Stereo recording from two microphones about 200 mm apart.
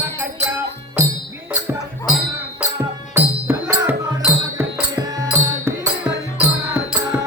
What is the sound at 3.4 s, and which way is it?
Music, 15° right (ahead or behind).